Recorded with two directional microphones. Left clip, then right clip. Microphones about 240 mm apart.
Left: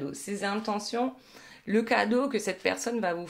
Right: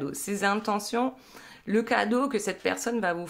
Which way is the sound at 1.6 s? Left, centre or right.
Centre.